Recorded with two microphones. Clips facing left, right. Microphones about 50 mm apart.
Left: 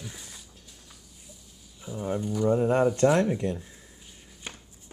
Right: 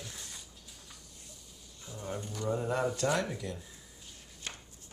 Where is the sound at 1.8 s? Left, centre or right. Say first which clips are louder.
Left 9 dB; centre.